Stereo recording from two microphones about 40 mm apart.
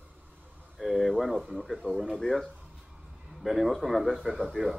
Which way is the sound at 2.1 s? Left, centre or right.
Centre.